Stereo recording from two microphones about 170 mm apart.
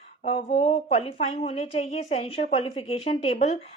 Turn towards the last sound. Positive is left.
turn(degrees=40)  # may be behind; listen again after turning